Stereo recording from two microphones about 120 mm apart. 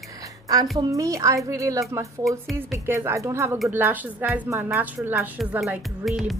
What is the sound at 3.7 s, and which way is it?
A woman's voice, 15° right (ahead or behind).